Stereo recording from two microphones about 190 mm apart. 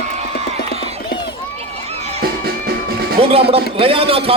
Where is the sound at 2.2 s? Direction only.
55° right (ahead or behind).